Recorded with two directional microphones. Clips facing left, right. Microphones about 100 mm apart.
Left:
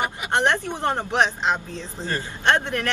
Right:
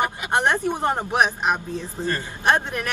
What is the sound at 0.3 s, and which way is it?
Speech, 15° right (ahead or behind).